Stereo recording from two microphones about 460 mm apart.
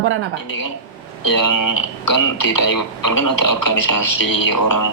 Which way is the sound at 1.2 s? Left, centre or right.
Left.